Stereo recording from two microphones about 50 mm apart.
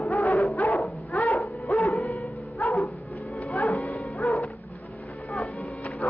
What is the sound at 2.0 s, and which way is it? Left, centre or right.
Dog, left.